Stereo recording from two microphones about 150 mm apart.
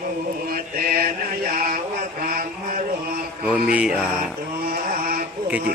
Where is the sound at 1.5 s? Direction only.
70° right (ahead or behind).